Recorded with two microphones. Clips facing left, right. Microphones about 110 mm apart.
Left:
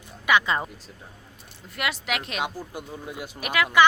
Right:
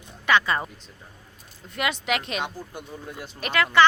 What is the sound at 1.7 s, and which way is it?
Speech, centre (ahead or behind).